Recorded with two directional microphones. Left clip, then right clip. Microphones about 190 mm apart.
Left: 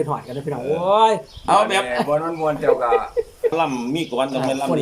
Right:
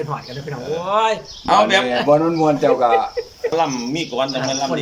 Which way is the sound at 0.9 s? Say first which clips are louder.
Left 2 dB; 25° left (ahead or behind).